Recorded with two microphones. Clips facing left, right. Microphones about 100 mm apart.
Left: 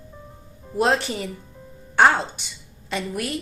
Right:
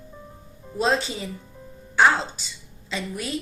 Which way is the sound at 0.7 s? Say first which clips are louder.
Left 2 dB; 60° left (ahead or behind).